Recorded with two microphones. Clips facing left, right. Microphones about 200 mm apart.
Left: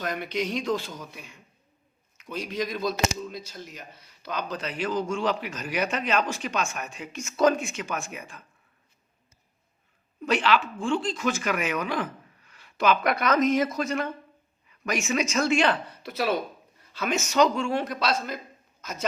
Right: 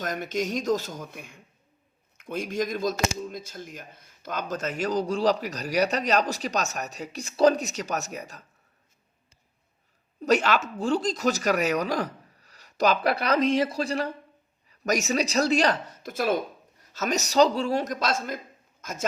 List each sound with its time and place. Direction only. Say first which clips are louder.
0.0 s a man's voice: right 1 dB; 45° right (ahead or behind)
10.2 s a man's voice: right 1 dB; 40° right (ahead or behind)